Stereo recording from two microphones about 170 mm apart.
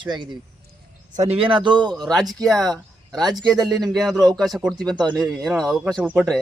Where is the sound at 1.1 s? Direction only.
35° right (ahead or behind).